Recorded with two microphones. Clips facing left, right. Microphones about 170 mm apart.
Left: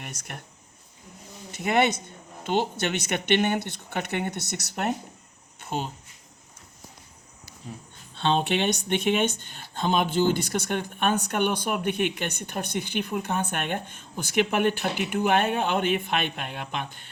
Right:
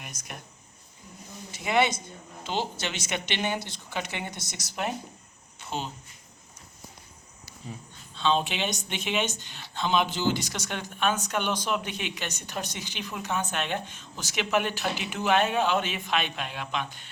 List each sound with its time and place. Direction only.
0.0 s speech: 65° left (ahead or behind)
1.5 s speech: 55° left (ahead or behind)
5.5 s a sound: 50° left (ahead or behind)
8.1 s speech: 60° left (ahead or behind)